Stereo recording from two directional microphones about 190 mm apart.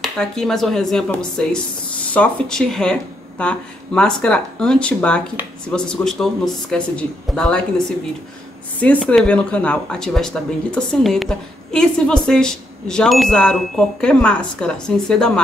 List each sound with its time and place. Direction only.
0.0 s speech: centre (ahead or behind)
8.8 s speech: 5° left (ahead or behind)